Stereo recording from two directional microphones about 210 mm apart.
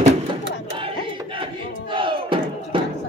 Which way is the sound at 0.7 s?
25° right (ahead or behind).